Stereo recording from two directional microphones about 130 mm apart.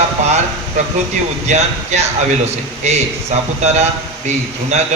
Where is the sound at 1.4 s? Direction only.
60° right (ahead or behind).